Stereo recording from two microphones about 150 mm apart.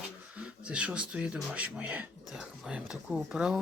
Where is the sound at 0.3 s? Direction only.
5° right (ahead or behind).